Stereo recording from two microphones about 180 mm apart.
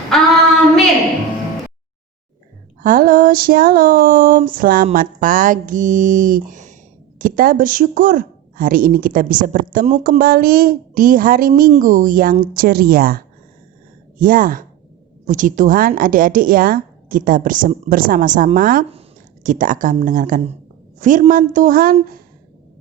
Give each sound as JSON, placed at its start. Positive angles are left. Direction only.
{"t": 2.8, "sound": "a woman's voice", "side_deg": -50}